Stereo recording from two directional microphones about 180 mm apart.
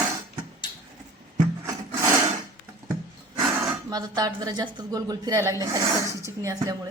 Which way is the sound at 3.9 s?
20° right (ahead or behind).